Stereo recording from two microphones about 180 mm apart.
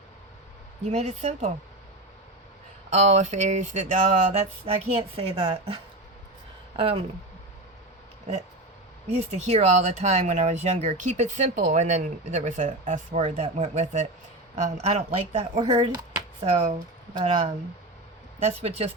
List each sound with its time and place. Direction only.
0.9 s speech: 40° right (ahead or behind)
2.9 s speech: 40° right (ahead or behind)
9.1 s speech: 35° right (ahead or behind)
16.5 s speech: 40° right (ahead or behind)
18.4 s speech: 35° right (ahead or behind)